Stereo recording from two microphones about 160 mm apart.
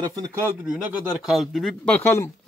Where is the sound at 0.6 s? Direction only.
5° right (ahead or behind); by 2.2 s 15° left (ahead or behind).